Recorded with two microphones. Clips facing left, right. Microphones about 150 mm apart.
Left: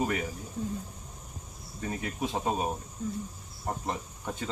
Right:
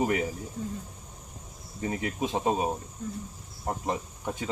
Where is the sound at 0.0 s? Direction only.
15° right (ahead or behind).